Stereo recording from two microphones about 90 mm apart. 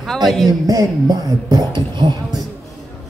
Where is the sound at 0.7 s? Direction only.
40° right (ahead or behind).